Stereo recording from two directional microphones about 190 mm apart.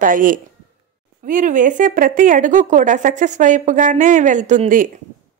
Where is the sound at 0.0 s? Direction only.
45° right (ahead or behind).